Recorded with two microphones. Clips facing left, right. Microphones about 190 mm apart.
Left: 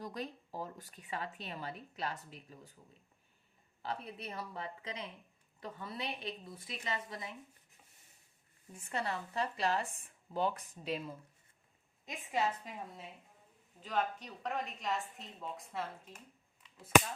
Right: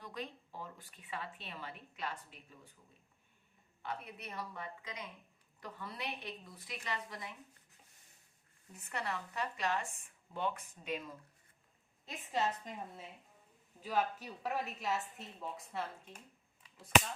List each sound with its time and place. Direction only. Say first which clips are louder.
0.0 s speech: left 3 dB; 40° left (ahead or behind)
3.8 s a woman's voice: left 3 dB; 30° left (ahead or behind)
8.7 s speech: left 3 dB; 25° left (ahead or behind)
12.0 s a woman's voice: left 1 dB; 15° left (ahead or behind)
13.8 s a woman's voice: right 1 dB; 10° right (ahead or behind)